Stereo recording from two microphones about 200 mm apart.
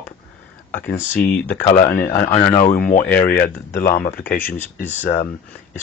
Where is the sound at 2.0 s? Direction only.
40° left (ahead or behind).